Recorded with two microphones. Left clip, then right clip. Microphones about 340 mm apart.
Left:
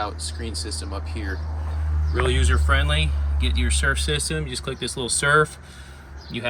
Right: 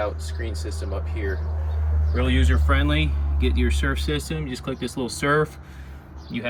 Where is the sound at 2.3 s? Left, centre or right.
Centre.